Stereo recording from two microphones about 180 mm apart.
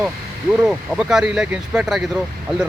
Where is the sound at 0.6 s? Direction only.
5° right (ahead or behind).